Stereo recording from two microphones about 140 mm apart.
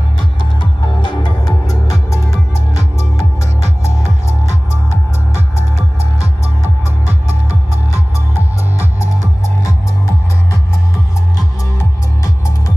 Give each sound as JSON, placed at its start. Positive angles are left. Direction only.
{"t": 0.6, "sound": "music", "side_deg": 30}
{"t": 2.3, "sound": "music", "side_deg": -50}
{"t": 8.4, "sound": "music", "side_deg": -15}